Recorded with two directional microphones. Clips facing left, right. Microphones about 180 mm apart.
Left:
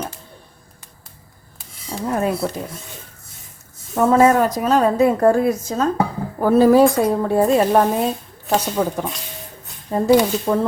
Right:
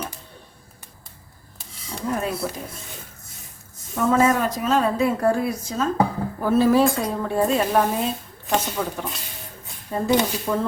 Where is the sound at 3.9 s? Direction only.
40° left (ahead or behind).